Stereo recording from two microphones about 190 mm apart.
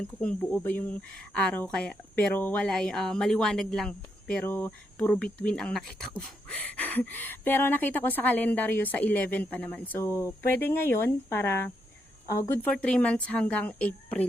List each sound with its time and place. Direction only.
0.0 s speech: 5° left (ahead or behind)